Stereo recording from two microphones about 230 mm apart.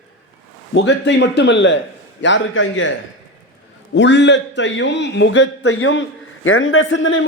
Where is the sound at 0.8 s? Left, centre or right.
Left.